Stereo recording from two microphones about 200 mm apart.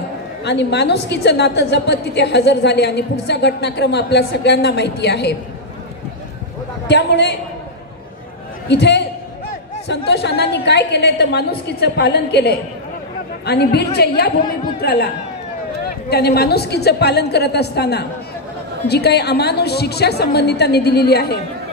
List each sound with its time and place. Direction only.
0.4 s a woman's voice: 60° left (ahead or behind)
6.9 s a woman's voice: 60° left (ahead or behind)
8.6 s a woman's voice: 60° left (ahead or behind)
16.1 s a woman's voice: 55° left (ahead or behind)